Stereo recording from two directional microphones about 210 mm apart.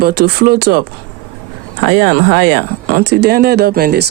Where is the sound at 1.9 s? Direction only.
50° right (ahead or behind).